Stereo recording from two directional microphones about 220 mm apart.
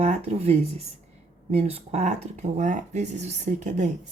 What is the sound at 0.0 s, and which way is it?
Speech, 30° right (ahead or behind).